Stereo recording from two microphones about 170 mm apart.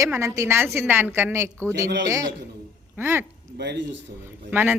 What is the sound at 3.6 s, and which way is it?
Speech, 85° right.